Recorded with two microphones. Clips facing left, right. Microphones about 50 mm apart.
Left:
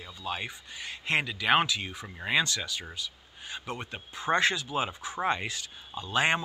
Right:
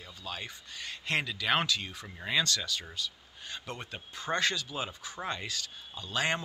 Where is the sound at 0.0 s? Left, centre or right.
Left.